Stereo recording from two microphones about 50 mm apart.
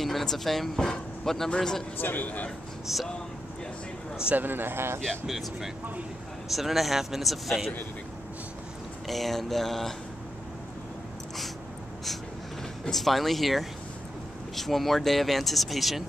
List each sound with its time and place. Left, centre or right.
0.0 s speech: centre
2.0 s speech: left
2.9 s speech: centre
4.4 s speech: right
5.2 s speech: centre
9.0 s speech: centre
12.9 s speech: centre